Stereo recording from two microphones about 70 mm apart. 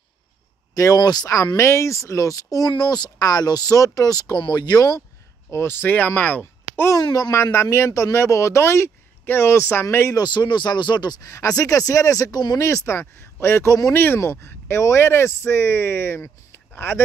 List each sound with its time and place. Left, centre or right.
0.9 s speech: left
1.6 s speech: left
5.5 s speech: left
7.0 s speech: left
7.5 s speech: left
10.1 s speech: left
11.2 s speech: left
12.5 s speech: left